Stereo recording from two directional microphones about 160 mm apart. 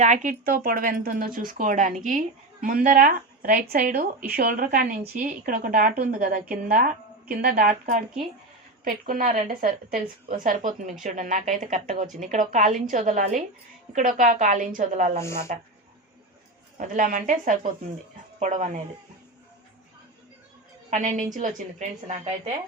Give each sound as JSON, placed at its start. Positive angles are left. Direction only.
{"t": 0.0, "sound": "a woman's voice", "side_deg": -50}
{"t": 8.8, "sound": "a woman's voice", "side_deg": -60}
{"t": 16.7, "sound": "a woman's voice", "side_deg": -55}
{"t": 20.9, "sound": "a woman's voice", "side_deg": -50}